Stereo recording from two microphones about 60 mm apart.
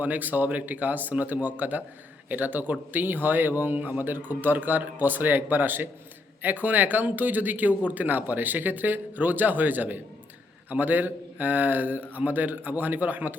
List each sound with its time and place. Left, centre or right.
0.0 s a man's voice: right